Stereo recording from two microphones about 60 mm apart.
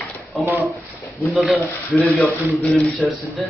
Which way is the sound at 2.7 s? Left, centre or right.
Centre.